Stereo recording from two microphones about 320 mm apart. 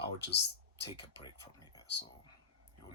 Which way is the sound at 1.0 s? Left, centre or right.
Centre.